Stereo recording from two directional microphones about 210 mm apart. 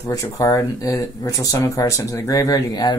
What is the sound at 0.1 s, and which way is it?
Speech, 15° left (ahead or behind).